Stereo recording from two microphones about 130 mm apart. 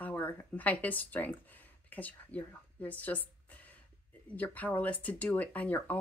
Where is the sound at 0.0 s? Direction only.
15° left (ahead or behind).